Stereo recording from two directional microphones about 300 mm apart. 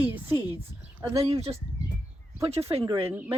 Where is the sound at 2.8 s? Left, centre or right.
Centre.